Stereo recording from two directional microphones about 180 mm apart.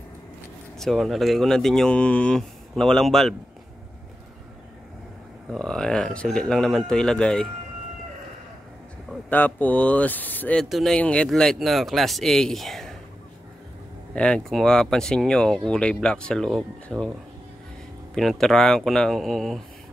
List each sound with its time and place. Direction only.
0.7 s speech: centre (ahead or behind)
5.5 s speech: 5° left (ahead or behind)
9.3 s speech: 10° left (ahead or behind)
14.1 s speech: 5° left (ahead or behind)
18.1 s speech: centre (ahead or behind)